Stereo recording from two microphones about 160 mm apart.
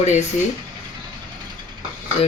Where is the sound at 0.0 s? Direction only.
45° left (ahead or behind).